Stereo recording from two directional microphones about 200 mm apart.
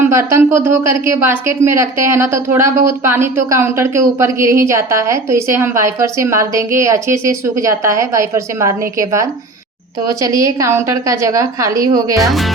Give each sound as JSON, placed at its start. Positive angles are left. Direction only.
{"t": 0.0, "sound": "speech", "side_deg": -15}